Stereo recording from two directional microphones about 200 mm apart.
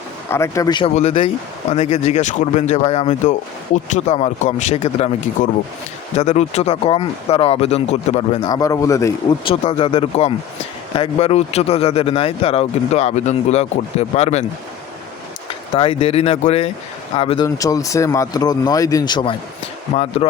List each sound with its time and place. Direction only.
0.3 s speech: 15° left (ahead or behind); by 8.4 s 35° left (ahead or behind)
8.4 s speech: 20° left (ahead or behind)
9.5 s speech: 25° left (ahead or behind)
15.7 s speech: 25° left (ahead or behind)
17.4 s speech: 15° left (ahead or behind)